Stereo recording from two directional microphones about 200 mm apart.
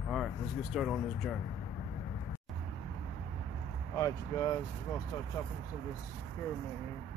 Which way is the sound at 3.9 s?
15° left (ahead or behind).